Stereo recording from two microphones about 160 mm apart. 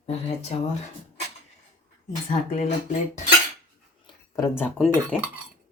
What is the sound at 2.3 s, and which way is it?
Speech, 50° left (ahead or behind).